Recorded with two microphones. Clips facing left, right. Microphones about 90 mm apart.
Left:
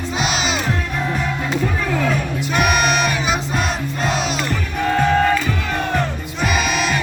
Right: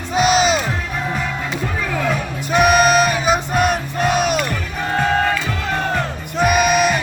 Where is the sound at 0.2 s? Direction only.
40° right (ahead or behind).